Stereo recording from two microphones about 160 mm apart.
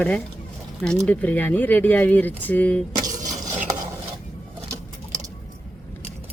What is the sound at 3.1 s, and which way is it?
Stir, 50° right (ahead or behind).